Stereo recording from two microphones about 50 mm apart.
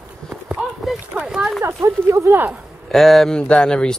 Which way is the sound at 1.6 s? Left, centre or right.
Right.